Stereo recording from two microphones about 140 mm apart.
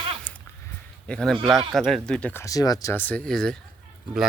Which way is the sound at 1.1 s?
5° left (ahead or behind).